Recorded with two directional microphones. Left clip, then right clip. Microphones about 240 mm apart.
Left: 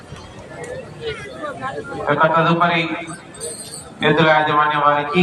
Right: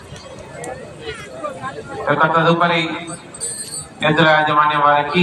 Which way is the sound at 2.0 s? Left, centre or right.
Right.